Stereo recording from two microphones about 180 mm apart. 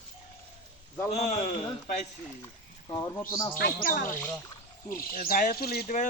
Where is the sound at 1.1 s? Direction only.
40° left (ahead or behind).